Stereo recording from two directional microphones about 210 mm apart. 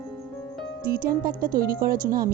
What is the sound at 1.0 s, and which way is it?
Speech, 45° right (ahead or behind).